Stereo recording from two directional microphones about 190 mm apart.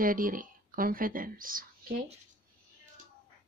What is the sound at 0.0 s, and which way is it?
Speech, 45° right (ahead or behind).